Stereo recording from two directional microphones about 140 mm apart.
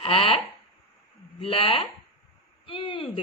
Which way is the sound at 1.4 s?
40° left (ahead or behind).